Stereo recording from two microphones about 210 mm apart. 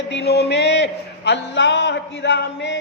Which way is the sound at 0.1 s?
55° left (ahead or behind).